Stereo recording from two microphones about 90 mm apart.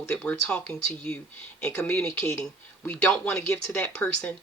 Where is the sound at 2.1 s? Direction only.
30° left (ahead or behind).